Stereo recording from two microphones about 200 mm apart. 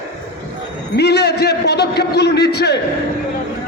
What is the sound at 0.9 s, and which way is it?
A man's voice, 55° left (ahead or behind).